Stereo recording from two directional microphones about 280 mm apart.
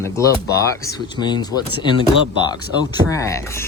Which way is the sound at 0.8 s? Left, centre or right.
Centre.